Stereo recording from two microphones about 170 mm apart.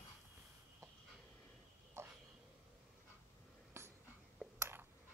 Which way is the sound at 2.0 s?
15° right (ahead or behind).